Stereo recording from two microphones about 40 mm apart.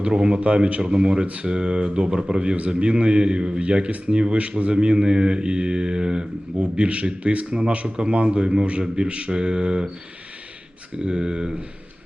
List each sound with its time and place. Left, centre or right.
0.0 s speech: right
6.6 s a man's voice: right
11.0 s speech: right